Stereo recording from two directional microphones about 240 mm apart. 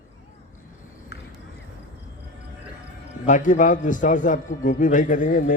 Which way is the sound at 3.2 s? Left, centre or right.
Left.